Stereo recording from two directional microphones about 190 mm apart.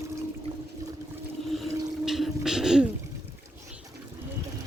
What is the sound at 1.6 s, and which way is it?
Water, centre (ahead or behind).